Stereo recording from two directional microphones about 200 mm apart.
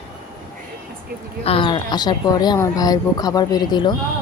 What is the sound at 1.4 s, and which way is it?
Speech, 25° left (ahead or behind).